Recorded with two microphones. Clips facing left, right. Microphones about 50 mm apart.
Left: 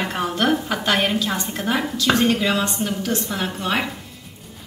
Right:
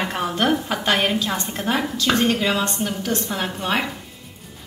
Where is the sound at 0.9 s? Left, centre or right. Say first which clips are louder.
Even; centre.